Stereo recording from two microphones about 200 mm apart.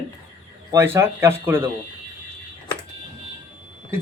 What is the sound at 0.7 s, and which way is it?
Speech, 15° right (ahead or behind).